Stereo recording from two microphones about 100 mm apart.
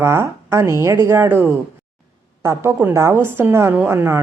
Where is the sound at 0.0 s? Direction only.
25° right (ahead or behind).